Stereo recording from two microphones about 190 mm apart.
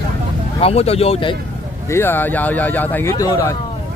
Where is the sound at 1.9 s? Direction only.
10° left (ahead or behind).